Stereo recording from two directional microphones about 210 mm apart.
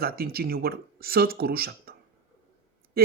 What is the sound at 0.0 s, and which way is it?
Speech, 45° right (ahead or behind).